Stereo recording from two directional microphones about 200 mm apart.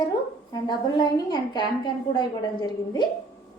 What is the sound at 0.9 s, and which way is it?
Speech, 20° left (ahead or behind).